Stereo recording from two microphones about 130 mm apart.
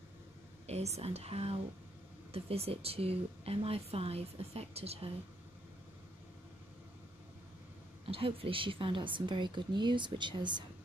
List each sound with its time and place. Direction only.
0.7 s speech: 55° right (ahead or behind)
8.0 s a woman's voice: 45° right (ahead or behind)